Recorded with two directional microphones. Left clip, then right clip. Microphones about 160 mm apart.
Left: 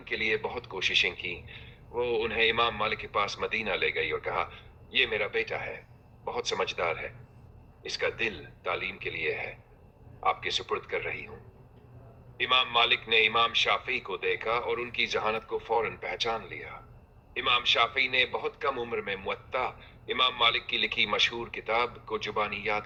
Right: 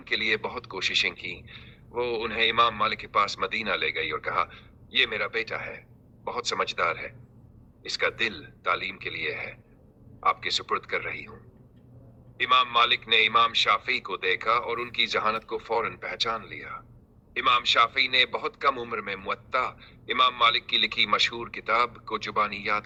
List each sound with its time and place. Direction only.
0.3 s speech: 35° right (ahead or behind)
0.5 s speech: 10° left (ahead or behind)
8.1 s speech: 10° left (ahead or behind)
12.4 s speech: 10° left (ahead or behind)
14.1 s speech: 35° right (ahead or behind)
14.3 s speech: 10° left (ahead or behind)